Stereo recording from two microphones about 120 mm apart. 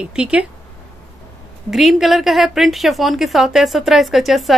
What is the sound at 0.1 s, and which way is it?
Speech, 10° right (ahead or behind).